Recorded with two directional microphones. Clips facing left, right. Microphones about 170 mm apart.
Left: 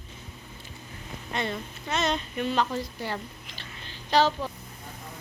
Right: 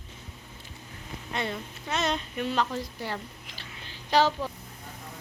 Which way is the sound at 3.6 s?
10° right (ahead or behind).